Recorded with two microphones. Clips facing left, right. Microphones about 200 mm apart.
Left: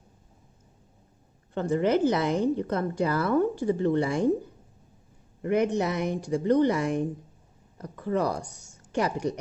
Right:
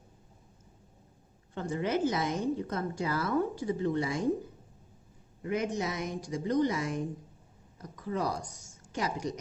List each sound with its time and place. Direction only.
1.5 s a woman's voice: 60° left (ahead or behind)
5.4 s a woman's voice: 60° left (ahead or behind)